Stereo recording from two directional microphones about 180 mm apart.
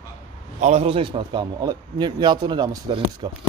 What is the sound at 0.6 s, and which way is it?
A man's voice, 40° right (ahead or behind).